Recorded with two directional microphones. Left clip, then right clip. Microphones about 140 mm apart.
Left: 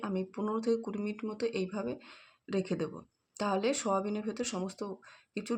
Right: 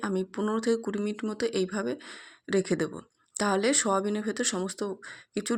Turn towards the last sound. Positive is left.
turn(degrees=-20)  # may be behind; listen again after turning